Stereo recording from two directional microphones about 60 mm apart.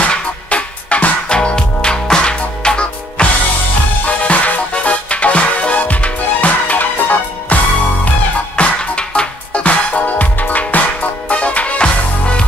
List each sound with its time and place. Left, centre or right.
0.0 s music: centre
4.2 s music: left
8.5 s music: centre